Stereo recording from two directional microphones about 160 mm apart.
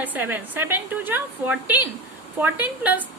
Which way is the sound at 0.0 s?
10° right (ahead or behind).